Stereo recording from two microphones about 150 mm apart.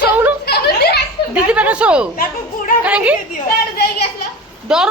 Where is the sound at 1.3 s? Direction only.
10° right (ahead or behind).